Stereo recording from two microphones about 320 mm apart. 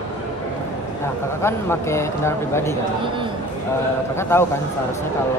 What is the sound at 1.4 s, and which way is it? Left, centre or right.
A man's voice, centre.